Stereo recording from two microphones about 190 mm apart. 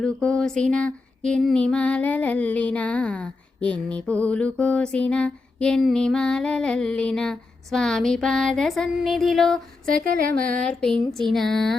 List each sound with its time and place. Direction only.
0.0 s female singing: 5° left (ahead or behind)
10.0 s a sound: 45° right (ahead or behind)
10.6 s female singing: 5° left (ahead or behind)